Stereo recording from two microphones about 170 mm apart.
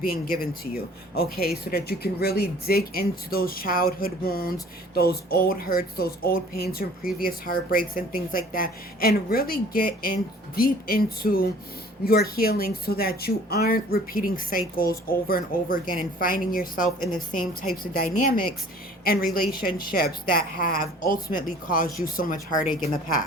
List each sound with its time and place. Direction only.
0.0 s speech: 60° left (ahead or behind)